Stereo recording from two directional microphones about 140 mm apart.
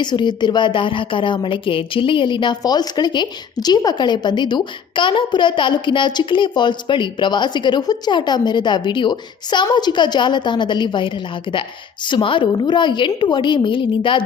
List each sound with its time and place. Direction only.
0.0 s a woman's voice: 30° left (ahead or behind)